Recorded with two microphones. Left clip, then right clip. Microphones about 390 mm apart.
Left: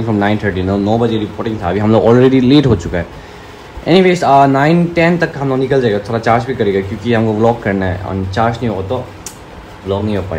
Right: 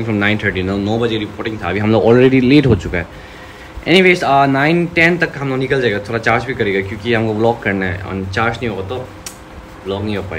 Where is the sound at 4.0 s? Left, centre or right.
Right.